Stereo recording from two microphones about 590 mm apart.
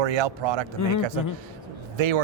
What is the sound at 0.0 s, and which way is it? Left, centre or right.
Speech, right.